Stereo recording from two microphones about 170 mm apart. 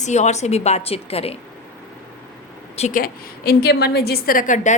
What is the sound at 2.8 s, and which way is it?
A woman's voice, 50° left (ahead or behind).